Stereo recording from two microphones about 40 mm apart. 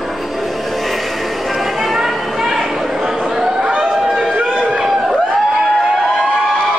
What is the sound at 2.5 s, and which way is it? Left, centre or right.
Chatter, centre.